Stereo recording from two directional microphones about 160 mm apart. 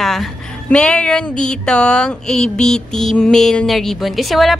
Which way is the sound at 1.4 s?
5° left (ahead or behind).